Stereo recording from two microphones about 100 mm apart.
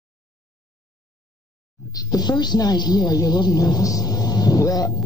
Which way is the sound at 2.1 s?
45° left (ahead or behind).